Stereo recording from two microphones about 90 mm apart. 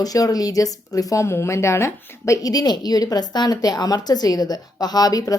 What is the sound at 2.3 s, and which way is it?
A woman's voice, 45° left (ahead or behind).